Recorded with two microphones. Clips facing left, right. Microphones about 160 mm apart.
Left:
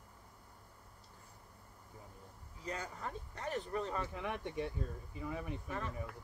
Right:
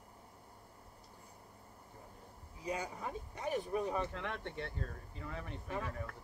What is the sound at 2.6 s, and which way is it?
Speech, 10° right (ahead or behind).